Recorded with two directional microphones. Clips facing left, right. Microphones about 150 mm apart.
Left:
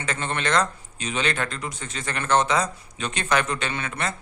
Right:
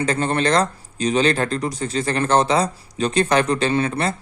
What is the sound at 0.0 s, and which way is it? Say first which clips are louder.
Speech: right 8 dB; 35° right (ahead or behind).